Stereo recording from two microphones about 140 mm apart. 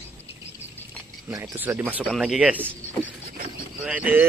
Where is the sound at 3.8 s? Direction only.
10° right (ahead or behind).